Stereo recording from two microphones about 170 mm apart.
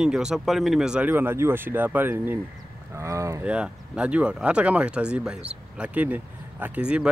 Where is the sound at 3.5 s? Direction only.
5° right (ahead or behind).